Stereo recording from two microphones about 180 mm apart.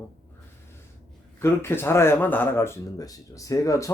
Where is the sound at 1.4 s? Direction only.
15° left (ahead or behind).